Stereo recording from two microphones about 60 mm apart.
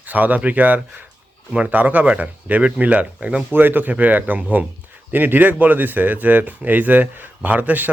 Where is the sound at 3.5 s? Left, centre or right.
Right.